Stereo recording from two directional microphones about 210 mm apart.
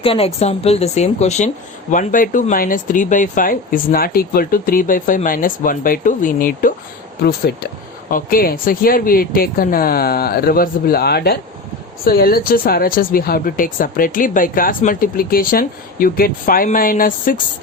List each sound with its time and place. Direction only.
0.0 s a woman's voice: 25° left (ahead or behind)